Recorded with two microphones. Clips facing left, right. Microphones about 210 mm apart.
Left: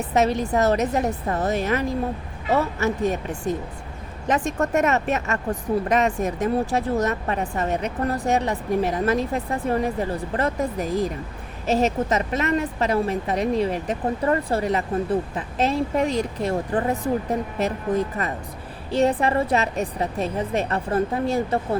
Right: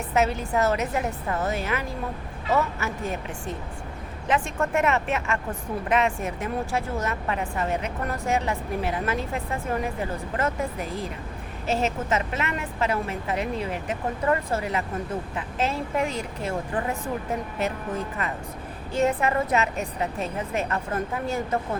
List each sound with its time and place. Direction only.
0.1 s a woman's voice: 35° left (ahead or behind)